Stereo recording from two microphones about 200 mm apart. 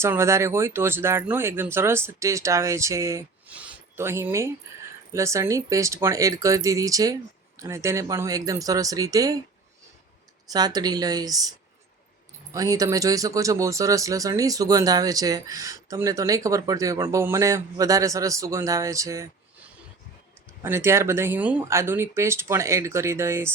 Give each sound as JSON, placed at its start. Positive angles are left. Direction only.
{"t": 0.0, "sound": "speech", "side_deg": -15}
{"t": 10.5, "sound": "speech", "side_deg": -20}
{"t": 12.5, "sound": "speech", "side_deg": -15}
{"t": 20.6, "sound": "speech", "side_deg": -15}